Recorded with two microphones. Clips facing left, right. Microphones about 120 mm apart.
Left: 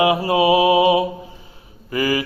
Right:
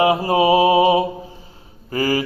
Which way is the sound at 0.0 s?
35° right (ahead or behind).